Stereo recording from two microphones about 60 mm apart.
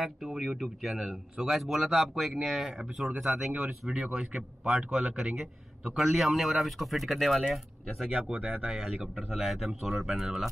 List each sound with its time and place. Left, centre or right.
0.0 s a man's voice: centre
8.3 s speech: right
8.6 s a man's voice: centre